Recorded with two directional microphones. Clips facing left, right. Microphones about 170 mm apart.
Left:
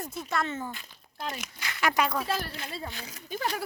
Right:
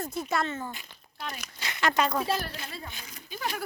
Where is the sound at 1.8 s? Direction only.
10° left (ahead or behind).